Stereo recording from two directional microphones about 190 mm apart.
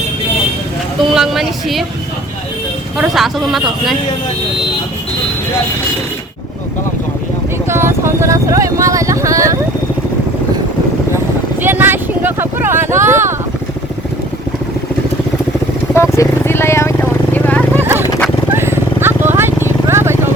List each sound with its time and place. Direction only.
1.0 s a man's voice: centre (ahead or behind)
3.0 s a man's voice: centre (ahead or behind)
7.7 s speech: 15° right (ahead or behind)
11.6 s vehicle: 10° right (ahead or behind)
16.0 s vehicle: 15° left (ahead or behind)
18.5 s vehicle: 10° right (ahead or behind)